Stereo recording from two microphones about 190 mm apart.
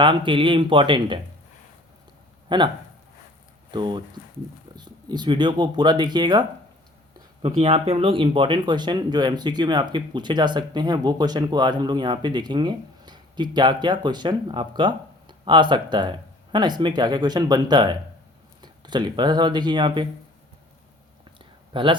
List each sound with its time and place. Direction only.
0.0 s speech: 25° right (ahead or behind)
2.5 s speech: 25° right (ahead or behind)
3.7 s speech: 25° right (ahead or behind)
7.4 s speech: 30° right (ahead or behind)
21.3 s a sound: 25° right (ahead or behind)